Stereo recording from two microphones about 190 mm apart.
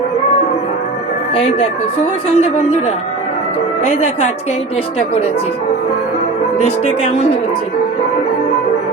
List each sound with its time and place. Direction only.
1.4 s music: 40° left (ahead or behind)
6.7 s music: 30° left (ahead or behind)